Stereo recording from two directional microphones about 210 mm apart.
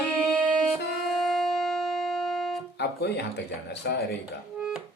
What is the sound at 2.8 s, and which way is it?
Music, 50° left (ahead or behind).